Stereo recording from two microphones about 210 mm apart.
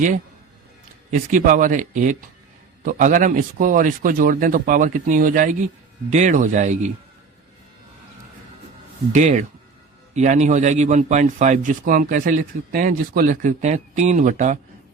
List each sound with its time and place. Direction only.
1.1 s a man's voice: 40° right (ahead or behind)
9.1 s a man's voice: 35° right (ahead or behind)